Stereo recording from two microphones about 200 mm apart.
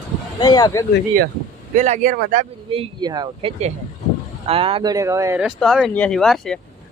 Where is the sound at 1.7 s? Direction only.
40° right (ahead or behind); by 5.5 s 15° right (ahead or behind).